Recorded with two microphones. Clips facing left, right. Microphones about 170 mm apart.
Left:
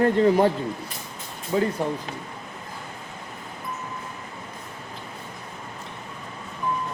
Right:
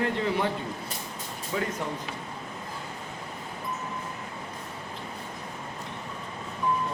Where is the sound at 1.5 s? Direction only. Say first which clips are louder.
Left 7 dB; 35° left (ahead or behind).